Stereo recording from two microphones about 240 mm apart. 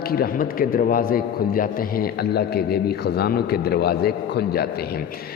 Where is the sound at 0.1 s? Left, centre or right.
Left.